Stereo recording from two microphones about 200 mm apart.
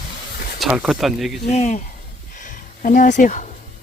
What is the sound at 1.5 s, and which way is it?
Speech, 35° left (ahead or behind).